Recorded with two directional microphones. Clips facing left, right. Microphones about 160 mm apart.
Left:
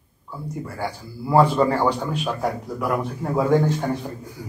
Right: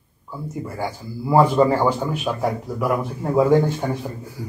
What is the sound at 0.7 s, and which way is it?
A man's voice, 10° right (ahead or behind).